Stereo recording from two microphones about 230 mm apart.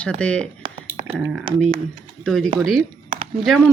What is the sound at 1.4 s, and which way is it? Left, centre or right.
Speech, right.